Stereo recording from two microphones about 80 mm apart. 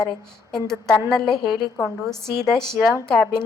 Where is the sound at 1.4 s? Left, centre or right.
Left.